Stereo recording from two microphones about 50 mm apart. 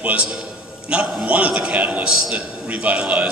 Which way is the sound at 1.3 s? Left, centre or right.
Right.